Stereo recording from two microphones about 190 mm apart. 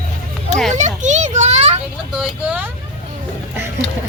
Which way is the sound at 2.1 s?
5° right (ahead or behind).